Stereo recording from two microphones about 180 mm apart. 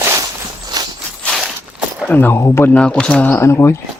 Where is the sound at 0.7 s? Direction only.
20° right (ahead or behind).